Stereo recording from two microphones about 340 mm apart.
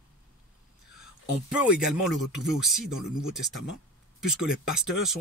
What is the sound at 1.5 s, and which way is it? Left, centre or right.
Speech, centre.